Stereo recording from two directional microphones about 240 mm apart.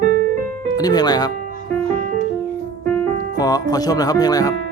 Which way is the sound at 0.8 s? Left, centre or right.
Centre.